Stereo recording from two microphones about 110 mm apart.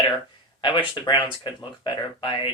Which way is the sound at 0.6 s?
45° left (ahead or behind).